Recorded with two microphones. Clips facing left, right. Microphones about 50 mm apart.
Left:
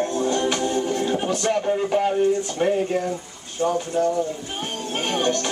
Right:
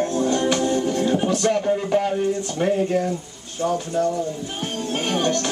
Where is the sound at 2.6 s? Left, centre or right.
Centre.